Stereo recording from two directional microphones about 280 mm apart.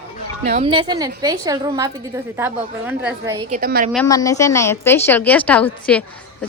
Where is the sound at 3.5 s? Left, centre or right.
Right.